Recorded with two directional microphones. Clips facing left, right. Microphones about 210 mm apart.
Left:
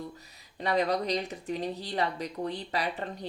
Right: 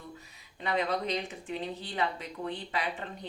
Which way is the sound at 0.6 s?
40° left (ahead or behind).